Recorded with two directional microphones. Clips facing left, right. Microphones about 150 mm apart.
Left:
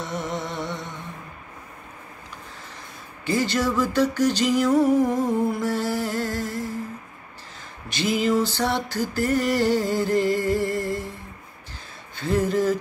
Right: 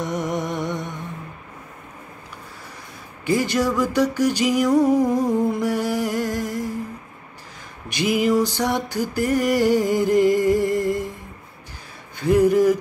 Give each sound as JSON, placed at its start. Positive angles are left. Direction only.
{"t": 0.0, "sound": "music", "side_deg": -15}
{"t": 3.3, "sound": "music", "side_deg": -15}
{"t": 7.9, "sound": "music", "side_deg": -15}
{"t": 12.2, "sound": "music", "side_deg": -15}